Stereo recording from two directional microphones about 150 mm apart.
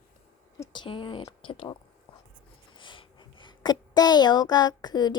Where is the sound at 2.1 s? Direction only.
35° left (ahead or behind).